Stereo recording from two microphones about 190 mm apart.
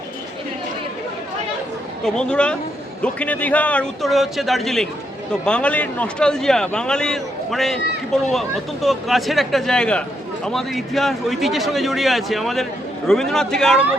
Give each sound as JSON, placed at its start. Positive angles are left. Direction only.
{"t": 2.0, "sound": "a man's voice", "side_deg": 5}